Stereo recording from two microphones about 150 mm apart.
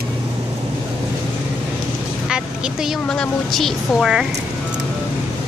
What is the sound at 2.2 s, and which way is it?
A woman's voice, 5° right (ahead or behind).